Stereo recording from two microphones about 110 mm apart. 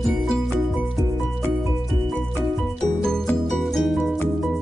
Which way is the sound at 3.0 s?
5° left (ahead or behind).